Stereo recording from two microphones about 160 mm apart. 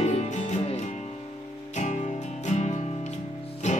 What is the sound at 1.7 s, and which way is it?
Music, 50° left (ahead or behind).